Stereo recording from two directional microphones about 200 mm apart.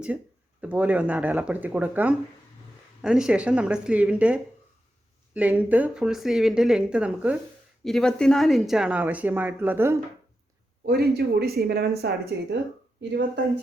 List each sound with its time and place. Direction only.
0.6 s speech: 5° right (ahead or behind)
10.8 s speech: 50° right (ahead or behind)